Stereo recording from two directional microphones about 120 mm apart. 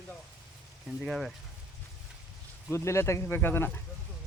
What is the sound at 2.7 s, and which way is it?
Speech, 20° left (ahead or behind).